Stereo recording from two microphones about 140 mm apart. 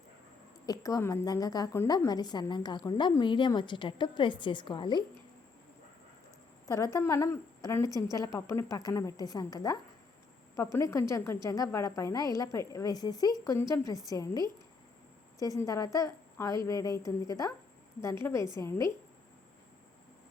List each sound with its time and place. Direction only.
0.6 s a woman's voice: 25° left (ahead or behind)
2.0 s a woman's voice: 30° left (ahead or behind)
6.7 s a woman's voice: 25° left (ahead or behind)